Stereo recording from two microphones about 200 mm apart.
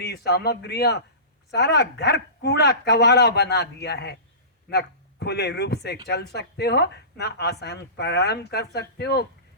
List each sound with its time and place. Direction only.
0.0 s a man's voice: 55° left (ahead or behind)